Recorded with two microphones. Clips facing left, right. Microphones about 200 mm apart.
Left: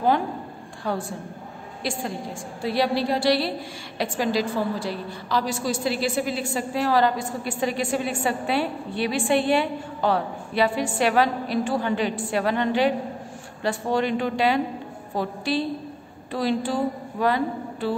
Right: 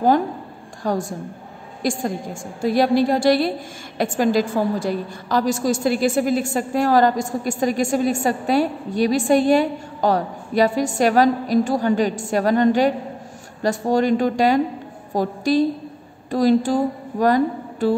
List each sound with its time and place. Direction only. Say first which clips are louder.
0.8 s a woman's voice: right 5 dB; 40° right (ahead or behind)